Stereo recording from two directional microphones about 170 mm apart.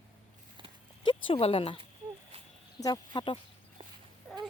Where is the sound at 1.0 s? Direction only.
35° left (ahead or behind).